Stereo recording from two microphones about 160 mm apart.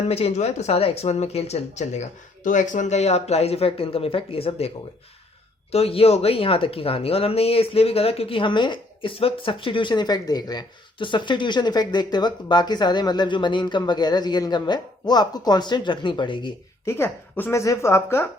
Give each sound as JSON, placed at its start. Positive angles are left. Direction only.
{"t": 0.1, "sound": "speech", "side_deg": 40}
{"t": 5.7, "sound": "speech", "side_deg": 40}
{"t": 16.8, "sound": "a woman's voice", "side_deg": 15}